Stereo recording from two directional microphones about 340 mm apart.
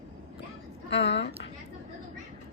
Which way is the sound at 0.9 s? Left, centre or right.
Left.